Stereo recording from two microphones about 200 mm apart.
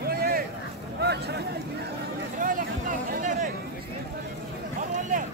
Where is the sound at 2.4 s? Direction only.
45° right (ahead or behind).